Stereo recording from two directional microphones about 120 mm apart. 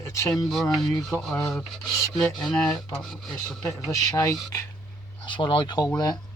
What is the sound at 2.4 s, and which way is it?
Speech, 5° left (ahead or behind).